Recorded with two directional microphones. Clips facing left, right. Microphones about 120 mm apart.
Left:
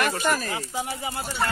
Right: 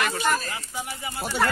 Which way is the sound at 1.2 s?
65° right (ahead or behind).